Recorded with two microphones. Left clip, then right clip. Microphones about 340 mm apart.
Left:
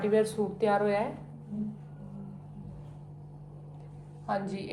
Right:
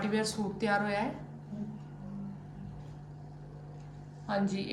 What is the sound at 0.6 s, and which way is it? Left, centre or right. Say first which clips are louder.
Speech: left 4 dB; centre.